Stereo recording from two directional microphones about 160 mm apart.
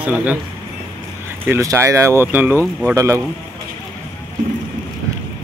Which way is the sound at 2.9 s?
20° right (ahead or behind).